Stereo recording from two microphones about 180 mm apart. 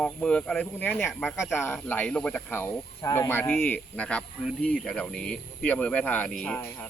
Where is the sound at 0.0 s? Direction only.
5° left (ahead or behind).